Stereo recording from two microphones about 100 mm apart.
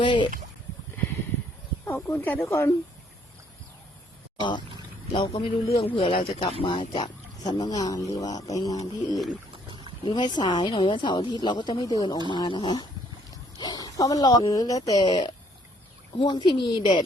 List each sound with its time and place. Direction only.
0.0 s a sound: 60° left (ahead or behind)
2.0 s speech: 20° left (ahead or behind)
4.4 s speech: 55° left (ahead or behind)
5.1 s a man's voice: 65° left (ahead or behind)
7.4 s speech: 40° left (ahead or behind)
10.0 s speech: 50° left (ahead or behind)